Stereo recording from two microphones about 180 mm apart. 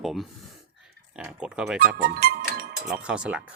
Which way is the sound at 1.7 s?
55° right (ahead or behind).